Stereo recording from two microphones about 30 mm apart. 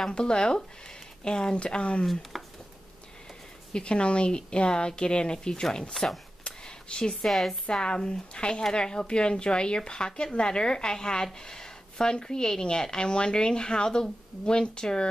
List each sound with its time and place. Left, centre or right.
0.1 s speech: left
2.3 s a sound: centre
3.7 s speech: left
6.4 s a sound: left
7.2 s a woman's voice: centre
8.4 s speech: left